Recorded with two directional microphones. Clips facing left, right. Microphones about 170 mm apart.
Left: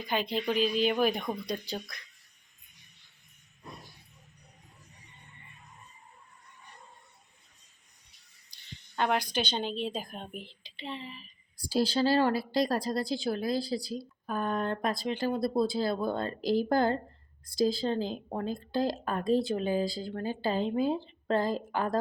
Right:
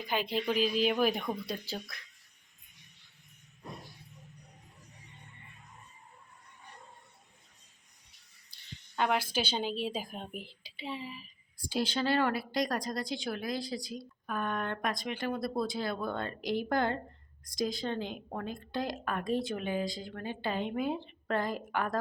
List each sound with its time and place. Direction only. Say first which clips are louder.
0.0 s speech: left 2 dB; 5° right (ahead or behind)
9.0 s a woman's voice: left 1 dB; 5° right (ahead or behind)
11.7 s speech: left 4 dB; 35° left (ahead or behind)